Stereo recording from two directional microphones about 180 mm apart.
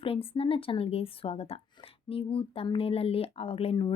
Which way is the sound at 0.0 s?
30° left (ahead or behind).